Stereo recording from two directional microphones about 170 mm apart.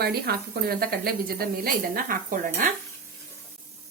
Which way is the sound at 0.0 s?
65° right (ahead or behind).